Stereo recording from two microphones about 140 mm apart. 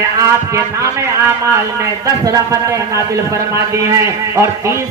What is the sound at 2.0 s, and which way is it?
Speech, 25° right (ahead or behind).